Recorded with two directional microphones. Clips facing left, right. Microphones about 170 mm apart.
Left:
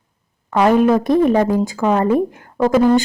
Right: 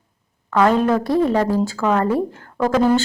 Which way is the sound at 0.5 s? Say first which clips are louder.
Left 3 dB; 15° left (ahead or behind).